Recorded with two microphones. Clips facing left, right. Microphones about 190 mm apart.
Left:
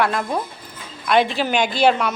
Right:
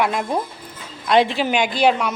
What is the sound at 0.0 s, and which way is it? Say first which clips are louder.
Speech: even; 15° right (ahead or behind).